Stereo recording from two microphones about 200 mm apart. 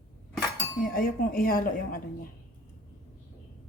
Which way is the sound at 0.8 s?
45° left (ahead or behind).